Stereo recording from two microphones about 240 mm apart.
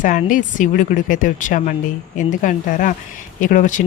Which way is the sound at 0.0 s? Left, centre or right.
Left.